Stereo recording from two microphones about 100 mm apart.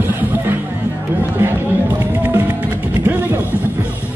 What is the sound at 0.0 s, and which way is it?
Music, 20° right (ahead or behind).